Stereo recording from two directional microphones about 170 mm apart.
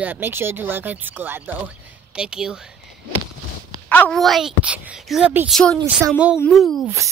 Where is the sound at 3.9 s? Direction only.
5° left (ahead or behind).